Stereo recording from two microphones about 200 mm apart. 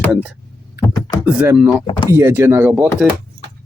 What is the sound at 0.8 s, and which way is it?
Speech, 20° left (ahead or behind).